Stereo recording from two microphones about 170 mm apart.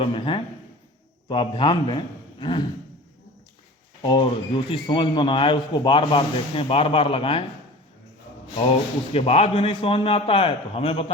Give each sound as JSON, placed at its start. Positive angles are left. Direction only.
{"t": 0.0, "sound": "a man's voice", "side_deg": 30}
{"t": 4.0, "sound": "speech", "side_deg": 25}
{"t": 9.1, "sound": "a man's voice", "side_deg": 35}